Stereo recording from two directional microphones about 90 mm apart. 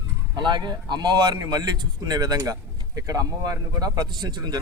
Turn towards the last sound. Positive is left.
turn(degrees=-55)  # may be behind; listen again after turning